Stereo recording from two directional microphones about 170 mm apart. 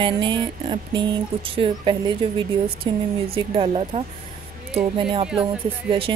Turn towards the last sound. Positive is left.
turn(degrees=-30)  # may be behind; listen again after turning